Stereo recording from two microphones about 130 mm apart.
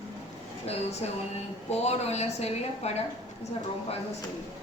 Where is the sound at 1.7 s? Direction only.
55° left (ahead or behind).